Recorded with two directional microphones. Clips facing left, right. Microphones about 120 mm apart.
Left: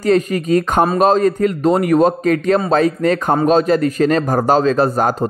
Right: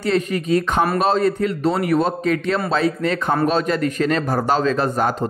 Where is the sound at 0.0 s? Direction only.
40° left (ahead or behind).